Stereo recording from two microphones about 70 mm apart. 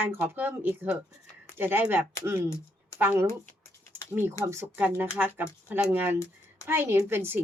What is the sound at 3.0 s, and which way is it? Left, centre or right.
Speech, right.